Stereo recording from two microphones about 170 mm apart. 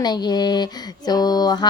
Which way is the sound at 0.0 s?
25° left (ahead or behind).